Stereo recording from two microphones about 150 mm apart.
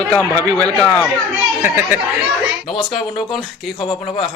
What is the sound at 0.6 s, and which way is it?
Speech, 5° left (ahead or behind).